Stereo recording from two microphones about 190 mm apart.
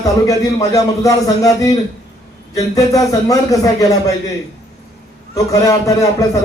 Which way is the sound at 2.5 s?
20° left (ahead or behind).